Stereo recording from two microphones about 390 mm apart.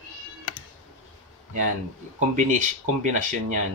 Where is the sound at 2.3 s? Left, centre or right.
Centre.